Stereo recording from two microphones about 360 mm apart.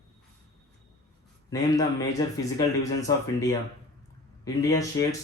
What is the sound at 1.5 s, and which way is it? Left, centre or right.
Speech, centre.